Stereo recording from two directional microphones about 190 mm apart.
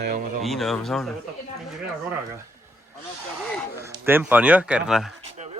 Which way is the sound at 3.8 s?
15° right (ahead or behind).